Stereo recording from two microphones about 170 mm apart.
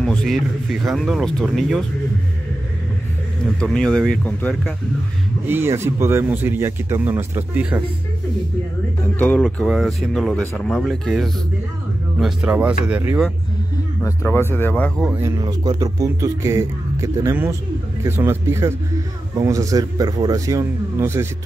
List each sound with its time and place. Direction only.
0.0 s speech: 5° left (ahead or behind)
3.4 s speech: 5° left (ahead or behind)
5.5 s speech: 15° right (ahead or behind)
9.2 s speech: 5° left (ahead or behind)
14.0 s speech: 15° left (ahead or behind)
15.2 s speech: 25° right (ahead or behind)